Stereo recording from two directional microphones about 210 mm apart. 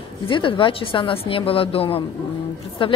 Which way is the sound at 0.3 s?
25° left (ahead or behind).